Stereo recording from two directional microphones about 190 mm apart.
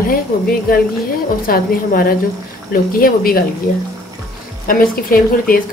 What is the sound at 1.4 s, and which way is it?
A woman's voice, 50° left (ahead or behind).